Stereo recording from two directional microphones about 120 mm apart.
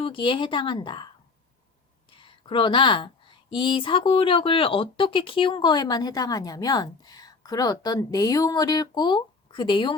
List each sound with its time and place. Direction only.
0.0 s speech: 45° left (ahead or behind)
2.0 s speech: 45° left (ahead or behind)